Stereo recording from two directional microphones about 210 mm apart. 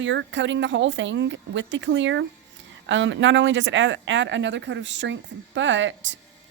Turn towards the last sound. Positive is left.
turn(degrees=-60)  # may be behind; listen again after turning